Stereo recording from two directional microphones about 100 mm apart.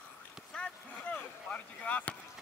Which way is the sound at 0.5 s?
15° left (ahead or behind).